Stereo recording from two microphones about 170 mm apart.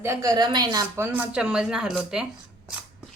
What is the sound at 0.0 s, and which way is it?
Speech, 20° right (ahead or behind).